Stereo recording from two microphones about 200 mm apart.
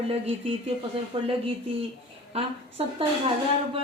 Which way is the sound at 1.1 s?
25° right (ahead or behind).